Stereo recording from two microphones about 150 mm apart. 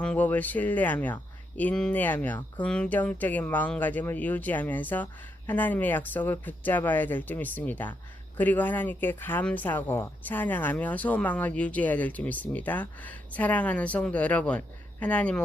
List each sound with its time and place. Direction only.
0.0 s speech: 10° left (ahead or behind)